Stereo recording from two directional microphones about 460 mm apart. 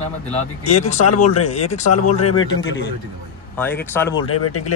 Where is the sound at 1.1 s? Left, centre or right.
Left.